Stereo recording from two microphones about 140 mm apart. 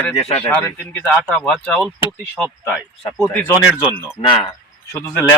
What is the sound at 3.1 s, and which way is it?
Speech, 20° left (ahead or behind).